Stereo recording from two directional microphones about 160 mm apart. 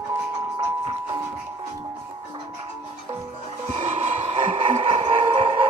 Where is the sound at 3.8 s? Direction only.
45° right (ahead or behind).